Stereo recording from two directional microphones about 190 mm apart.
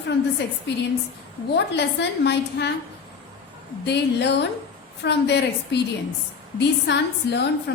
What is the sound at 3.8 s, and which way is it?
A woman's voice, 65° left (ahead or behind).